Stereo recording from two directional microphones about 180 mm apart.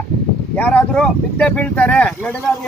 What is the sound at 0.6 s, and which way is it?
Speech, 5° left (ahead or behind).